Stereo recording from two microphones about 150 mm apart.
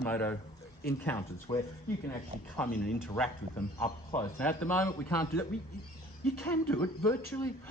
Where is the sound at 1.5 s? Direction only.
30° left (ahead or behind).